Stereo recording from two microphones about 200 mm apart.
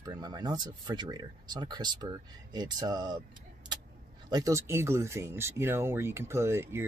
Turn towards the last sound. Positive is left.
turn(degrees=-10)  # may be behind; listen again after turning